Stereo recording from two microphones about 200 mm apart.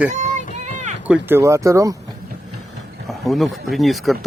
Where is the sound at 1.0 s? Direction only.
10° right (ahead or behind).